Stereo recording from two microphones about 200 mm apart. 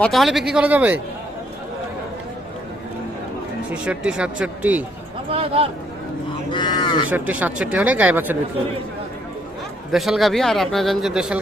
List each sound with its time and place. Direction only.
0.0 s a man's voice: centre (ahead or behind)
3.7 s a man's voice: 5° right (ahead or behind)
5.3 s speech: 30° right (ahead or behind)
6.5 s cattle: 20° left (ahead or behind)
7.1 s speech: 10° right (ahead or behind)
9.9 s a man's voice: centre (ahead or behind)